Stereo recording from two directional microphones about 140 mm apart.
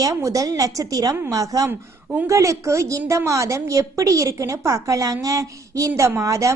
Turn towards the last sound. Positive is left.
turn(degrees=-20)  # may be behind; listen again after turning